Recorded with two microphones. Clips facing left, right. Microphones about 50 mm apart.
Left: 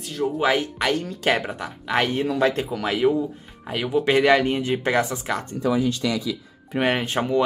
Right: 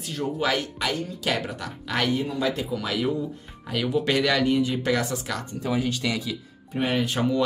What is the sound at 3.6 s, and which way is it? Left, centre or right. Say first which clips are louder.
Speech: left 3 dB; left.